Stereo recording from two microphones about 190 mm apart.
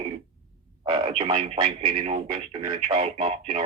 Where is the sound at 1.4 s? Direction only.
30° right (ahead or behind).